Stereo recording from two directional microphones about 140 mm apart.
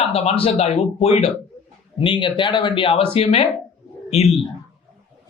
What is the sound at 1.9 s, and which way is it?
Speech, 35° left (ahead or behind).